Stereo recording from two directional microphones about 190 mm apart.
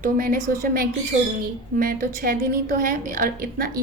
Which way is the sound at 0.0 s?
45° right (ahead or behind).